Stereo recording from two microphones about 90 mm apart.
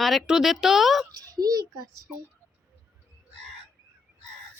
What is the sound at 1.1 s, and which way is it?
Speech, 40° right (ahead or behind).